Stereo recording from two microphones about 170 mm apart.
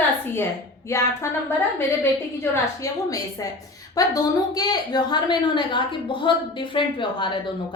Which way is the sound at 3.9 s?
20° left (ahead or behind).